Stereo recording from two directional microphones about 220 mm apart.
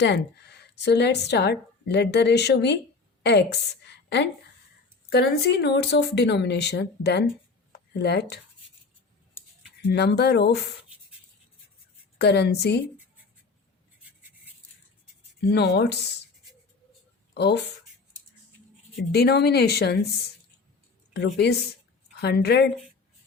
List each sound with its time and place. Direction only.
0.0 s a woman's voice: 50° left (ahead or behind)
7.7 s a sound: 50° left (ahead or behind)
9.9 s a woman's voice: 50° left (ahead or behind)
12.2 s a woman's voice: 50° left (ahead or behind)
14.0 s a sound: 5° right (ahead or behind)
15.4 s a woman's voice: 50° left (ahead or behind)
17.3 s speech: 50° left (ahead or behind)
19.1 s a woman's voice: 45° left (ahead or behind)
21.1 s a woman's voice: 50° left (ahead or behind)